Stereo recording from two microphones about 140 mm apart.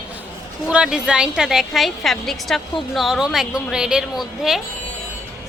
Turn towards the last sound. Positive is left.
turn(degrees=-5)  # may be behind; listen again after turning